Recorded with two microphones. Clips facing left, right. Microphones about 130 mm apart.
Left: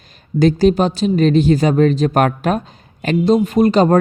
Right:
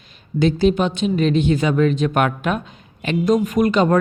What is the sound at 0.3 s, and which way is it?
A woman's voice, 40° left (ahead or behind).